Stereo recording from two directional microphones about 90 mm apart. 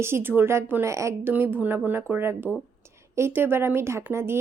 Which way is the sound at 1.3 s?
20° right (ahead or behind).